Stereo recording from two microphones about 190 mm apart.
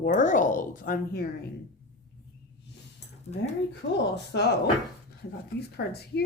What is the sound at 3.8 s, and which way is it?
Speech, 65° left (ahead or behind).